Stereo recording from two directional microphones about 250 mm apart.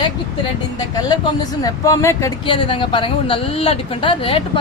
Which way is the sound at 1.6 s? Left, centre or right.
Centre.